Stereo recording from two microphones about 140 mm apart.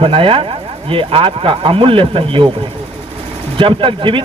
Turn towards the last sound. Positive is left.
turn(degrees=-40)  # may be behind; listen again after turning